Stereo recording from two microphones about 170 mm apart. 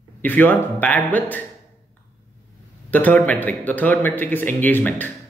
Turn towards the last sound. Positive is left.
turn(degrees=10)  # may be behind; listen again after turning